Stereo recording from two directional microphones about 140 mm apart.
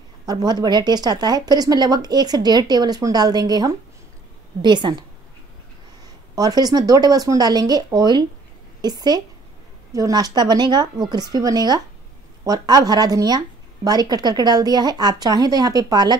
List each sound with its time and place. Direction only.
0.3 s a woman's voice: 30° right (ahead or behind)
6.3 s a woman's voice: 25° right (ahead or behind)